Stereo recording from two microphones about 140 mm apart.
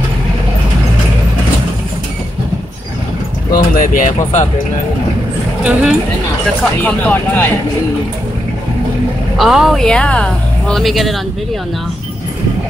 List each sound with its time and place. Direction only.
3.5 s speech: 75° left (ahead or behind)
5.6 s speech: 5° right (ahead or behind)
6.8 s speech: 10° left (ahead or behind)
9.4 s speech: centre (ahead or behind)